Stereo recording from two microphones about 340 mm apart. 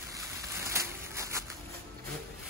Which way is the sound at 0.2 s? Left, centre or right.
Centre.